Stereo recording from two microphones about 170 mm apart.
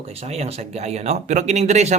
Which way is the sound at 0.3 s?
40° right (ahead or behind).